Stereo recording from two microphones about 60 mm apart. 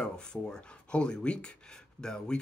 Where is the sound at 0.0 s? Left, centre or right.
Centre.